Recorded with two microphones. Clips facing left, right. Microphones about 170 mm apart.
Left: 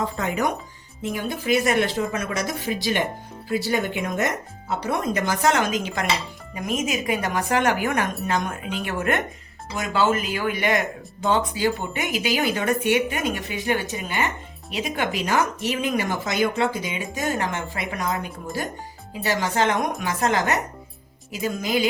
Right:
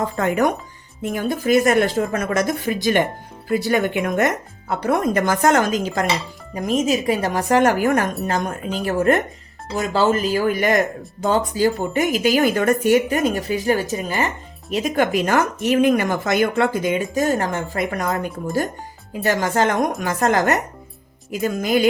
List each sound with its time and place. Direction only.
0.0 s speech: 50° right (ahead or behind)